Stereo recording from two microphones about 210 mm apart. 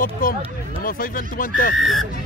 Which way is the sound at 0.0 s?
40° left (ahead or behind).